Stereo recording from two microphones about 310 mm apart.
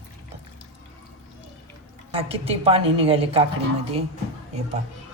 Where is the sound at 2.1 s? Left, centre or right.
Centre.